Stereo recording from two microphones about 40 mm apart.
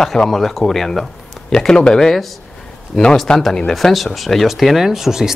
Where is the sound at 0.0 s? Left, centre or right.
Centre.